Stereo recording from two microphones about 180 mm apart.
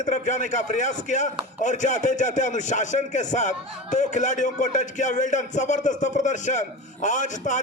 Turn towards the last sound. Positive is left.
turn(degrees=45)  # may be behind; listen again after turning